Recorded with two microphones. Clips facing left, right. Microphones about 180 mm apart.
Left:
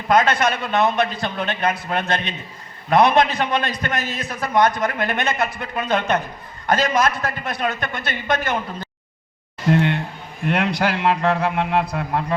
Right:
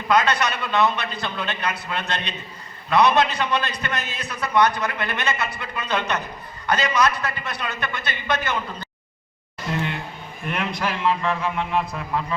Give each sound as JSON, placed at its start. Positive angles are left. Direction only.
{"t": 0.1, "sound": "a man's voice", "side_deg": 50}
{"t": 9.6, "sound": "a sound", "side_deg": 60}
{"t": 10.4, "sound": "a man's voice", "side_deg": 80}